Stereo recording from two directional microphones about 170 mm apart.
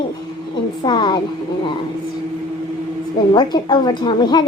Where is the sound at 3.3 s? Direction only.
25° left (ahead or behind).